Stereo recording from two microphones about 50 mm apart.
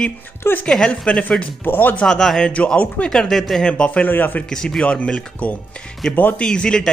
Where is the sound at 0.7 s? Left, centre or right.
Centre.